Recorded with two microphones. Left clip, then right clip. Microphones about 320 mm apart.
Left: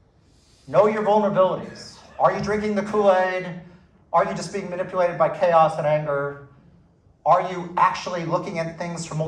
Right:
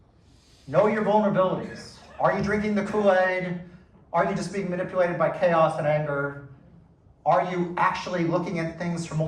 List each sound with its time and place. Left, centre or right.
0.7 s a man's voice: left
7.3 s a man's voice: left